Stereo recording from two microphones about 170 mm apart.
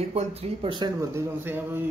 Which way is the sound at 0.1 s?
35° right (ahead or behind).